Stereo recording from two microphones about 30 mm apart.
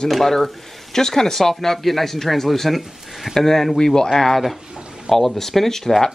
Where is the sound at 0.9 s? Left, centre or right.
Centre.